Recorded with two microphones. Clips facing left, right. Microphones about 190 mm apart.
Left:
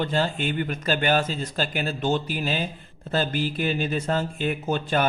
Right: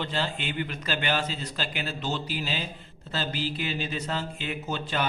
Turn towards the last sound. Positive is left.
turn(degrees=50)  # may be behind; listen again after turning